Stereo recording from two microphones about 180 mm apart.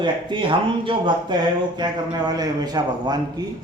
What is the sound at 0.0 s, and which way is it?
Speech, 25° right (ahead or behind).